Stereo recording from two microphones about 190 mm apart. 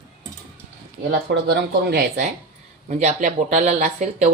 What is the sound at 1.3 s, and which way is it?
Speech, 60° right (ahead or behind).